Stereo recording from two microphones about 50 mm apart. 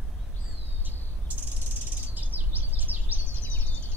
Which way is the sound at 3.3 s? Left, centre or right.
Left.